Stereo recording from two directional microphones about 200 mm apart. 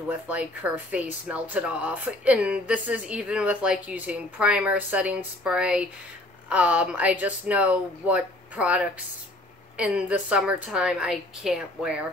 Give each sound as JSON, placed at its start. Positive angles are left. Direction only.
{"t": 0.1, "sound": "a woman's voice", "side_deg": -5}